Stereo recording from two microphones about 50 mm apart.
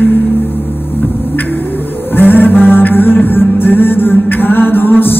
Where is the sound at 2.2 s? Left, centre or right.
Left.